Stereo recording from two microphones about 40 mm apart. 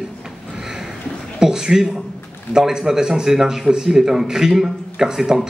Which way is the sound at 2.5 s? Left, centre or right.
Centre.